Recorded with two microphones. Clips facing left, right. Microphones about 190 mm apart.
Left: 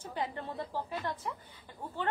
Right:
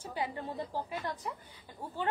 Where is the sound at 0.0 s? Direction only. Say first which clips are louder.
Even; 10° right (ahead or behind).